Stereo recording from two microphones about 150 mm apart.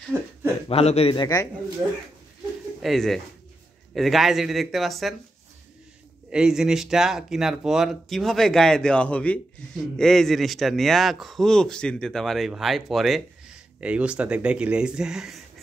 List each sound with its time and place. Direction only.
0.1 s speech: 15° right (ahead or behind)
0.7 s speech: 40° left (ahead or behind); by 1.5 s 25° left (ahead or behind)
2.8 s speech: centre (ahead or behind)
6.3 s speech: 5° right (ahead or behind)